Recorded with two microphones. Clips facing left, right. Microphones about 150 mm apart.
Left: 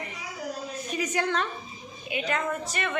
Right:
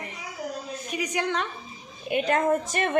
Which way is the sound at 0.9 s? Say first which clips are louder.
Even; 15° right (ahead or behind).